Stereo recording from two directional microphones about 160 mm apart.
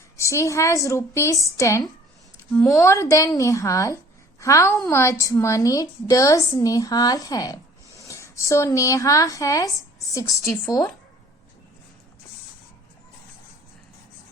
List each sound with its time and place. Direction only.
0.2 s a woman's voice: 20° left (ahead or behind)
2.5 s speech: 10° left (ahead or behind)
2.7 s a woman's voice: 20° left (ahead or behind)